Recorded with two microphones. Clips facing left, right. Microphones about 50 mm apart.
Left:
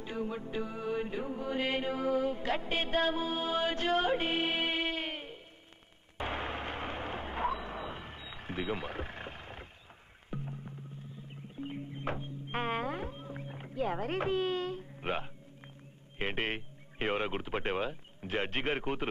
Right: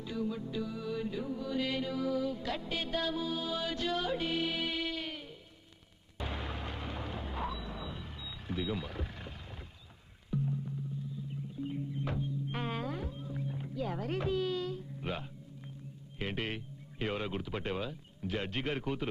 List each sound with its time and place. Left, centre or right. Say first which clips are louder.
0.0 s music: even; left
6.1 s a sound: left 4 dB; left
10.3 s music: right 6 dB; left